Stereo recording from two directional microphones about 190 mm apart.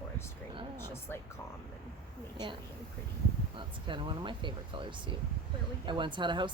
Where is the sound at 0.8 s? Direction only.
10° left (ahead or behind).